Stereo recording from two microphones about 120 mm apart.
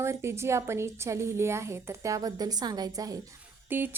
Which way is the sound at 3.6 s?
15° right (ahead or behind).